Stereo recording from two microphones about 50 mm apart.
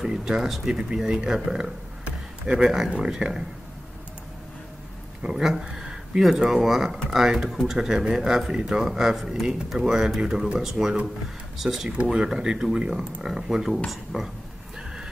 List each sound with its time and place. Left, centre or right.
0.0 s speech: centre
2.0 s a sound: right
2.9 s speech: centre
5.2 s speech: centre
11.9 s speech: centre